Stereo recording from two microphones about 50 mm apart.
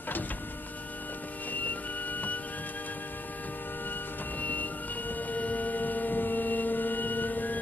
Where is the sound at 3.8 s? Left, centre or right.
Left.